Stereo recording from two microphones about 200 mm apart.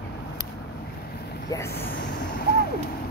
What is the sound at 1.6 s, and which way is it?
Vehicle, 50° left (ahead or behind).